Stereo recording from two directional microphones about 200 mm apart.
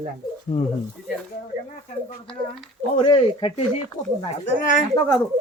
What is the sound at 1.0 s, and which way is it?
Speech, 55° left (ahead or behind).